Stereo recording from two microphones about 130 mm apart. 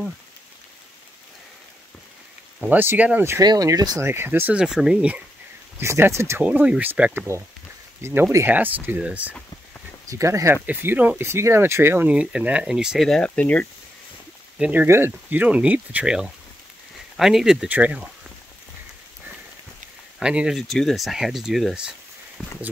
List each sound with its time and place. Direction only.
2.7 s speech: 15° right (ahead or behind)
3.3 s speech: 25° right (ahead or behind)
4.1 s speech: 15° right (ahead or behind)
5.8 s speech: 20° right (ahead or behind)
10.0 s speech: 25° right (ahead or behind); by 13.7 s 10° left (ahead or behind)
14.6 s speech: 15° right (ahead or behind)
20.2 s speech: 5° right (ahead or behind)
22.4 s speech: 10° left (ahead or behind)